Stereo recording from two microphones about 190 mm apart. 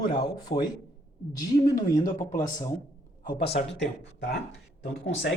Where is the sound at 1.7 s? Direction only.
20° left (ahead or behind).